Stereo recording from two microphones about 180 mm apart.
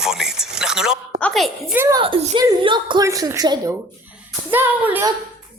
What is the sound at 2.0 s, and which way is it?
A woman's voice, 25° right (ahead or behind).